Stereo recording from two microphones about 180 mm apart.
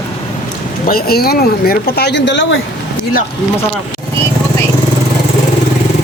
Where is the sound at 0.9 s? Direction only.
60° left (ahead or behind); by 2.6 s 85° left.